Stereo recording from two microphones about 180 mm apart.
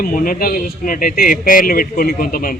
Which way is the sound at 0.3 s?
55° left (ahead or behind).